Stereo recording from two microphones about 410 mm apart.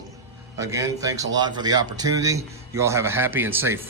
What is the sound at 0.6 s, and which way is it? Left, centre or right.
Speech, centre.